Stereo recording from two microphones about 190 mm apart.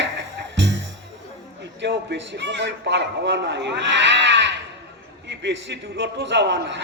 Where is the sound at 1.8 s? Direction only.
65° right (ahead or behind).